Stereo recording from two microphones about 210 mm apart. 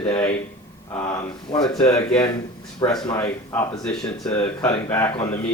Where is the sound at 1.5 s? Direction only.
20° left (ahead or behind).